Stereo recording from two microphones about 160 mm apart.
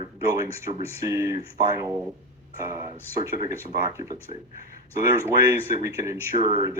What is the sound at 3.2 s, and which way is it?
Speech, 15° right (ahead or behind).